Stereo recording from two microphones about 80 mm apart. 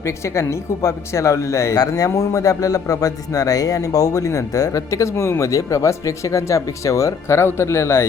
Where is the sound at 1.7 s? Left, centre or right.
Left.